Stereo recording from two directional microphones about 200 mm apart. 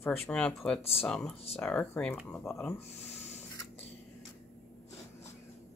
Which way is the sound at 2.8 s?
35° left (ahead or behind).